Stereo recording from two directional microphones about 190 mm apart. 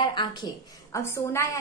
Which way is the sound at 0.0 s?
25° left (ahead or behind).